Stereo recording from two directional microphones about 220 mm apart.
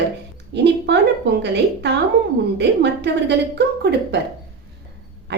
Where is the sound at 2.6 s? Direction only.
50° right (ahead or behind).